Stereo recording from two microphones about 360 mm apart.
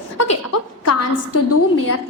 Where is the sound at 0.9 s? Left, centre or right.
Left.